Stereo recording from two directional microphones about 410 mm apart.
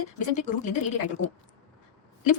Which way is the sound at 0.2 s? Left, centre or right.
Centre.